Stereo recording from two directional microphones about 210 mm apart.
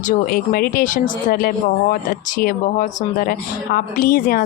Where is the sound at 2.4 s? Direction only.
45° left (ahead or behind).